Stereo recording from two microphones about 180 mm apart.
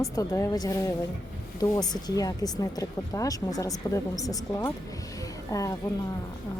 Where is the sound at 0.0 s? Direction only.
15° left (ahead or behind).